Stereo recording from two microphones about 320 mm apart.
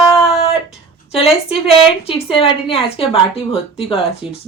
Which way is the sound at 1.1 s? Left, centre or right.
Centre.